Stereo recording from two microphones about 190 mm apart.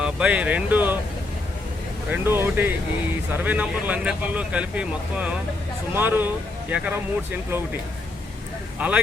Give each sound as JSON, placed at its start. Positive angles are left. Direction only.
{"t": 0.0, "sound": "speech", "side_deg": -5}
{"t": 2.0, "sound": "speech", "side_deg": -10}